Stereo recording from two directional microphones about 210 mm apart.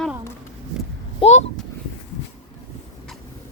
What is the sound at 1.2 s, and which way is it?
Speech, 30° left (ahead or behind).